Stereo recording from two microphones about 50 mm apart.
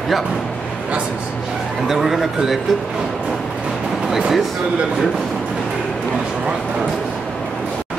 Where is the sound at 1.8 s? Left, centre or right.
Centre.